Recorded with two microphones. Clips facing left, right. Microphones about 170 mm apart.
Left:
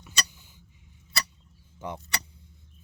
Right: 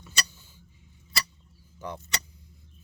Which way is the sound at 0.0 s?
15° left (ahead or behind).